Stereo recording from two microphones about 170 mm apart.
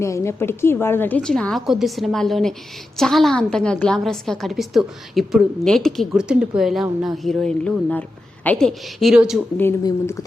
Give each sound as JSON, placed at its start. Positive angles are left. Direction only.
{"t": 0.0, "sound": "a woman's voice", "side_deg": 15}
{"t": 9.6, "sound": "speech", "side_deg": 15}